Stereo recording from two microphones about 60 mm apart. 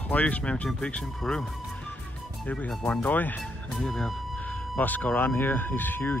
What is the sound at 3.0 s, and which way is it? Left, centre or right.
Speech, left.